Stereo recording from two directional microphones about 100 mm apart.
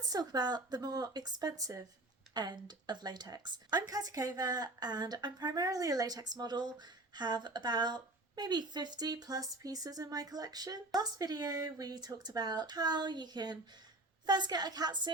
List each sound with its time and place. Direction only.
0.0 s speech: 40° right (ahead or behind)